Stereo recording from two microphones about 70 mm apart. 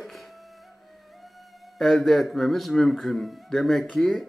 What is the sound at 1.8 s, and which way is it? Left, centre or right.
Speech, centre.